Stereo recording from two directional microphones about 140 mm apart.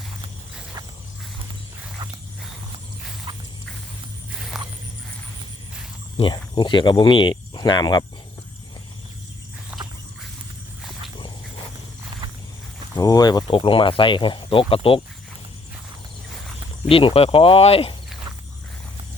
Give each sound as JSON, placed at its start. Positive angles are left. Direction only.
{"t": 2.0, "sound": "dog", "side_deg": -30}
{"t": 3.3, "sound": "walk", "side_deg": -35}
{"t": 6.1, "sound": "speech", "side_deg": 35}
{"t": 13.0, "sound": "speech", "side_deg": 25}
{"t": 16.9, "sound": "speech", "side_deg": 40}